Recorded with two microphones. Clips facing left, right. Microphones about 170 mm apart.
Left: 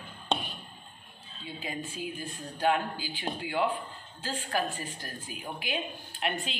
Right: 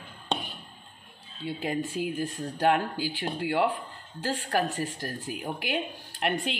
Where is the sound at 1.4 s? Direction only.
70° right (ahead or behind).